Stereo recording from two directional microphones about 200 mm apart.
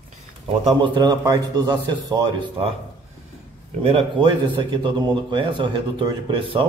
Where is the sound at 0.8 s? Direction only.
20° right (ahead or behind).